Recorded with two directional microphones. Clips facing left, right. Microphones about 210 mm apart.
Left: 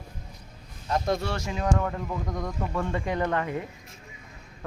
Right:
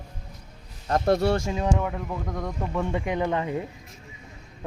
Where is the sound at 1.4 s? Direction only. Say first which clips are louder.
Right 3 dB; 25° right (ahead or behind).